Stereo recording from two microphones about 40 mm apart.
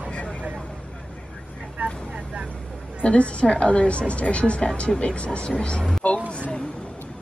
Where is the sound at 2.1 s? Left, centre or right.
Right.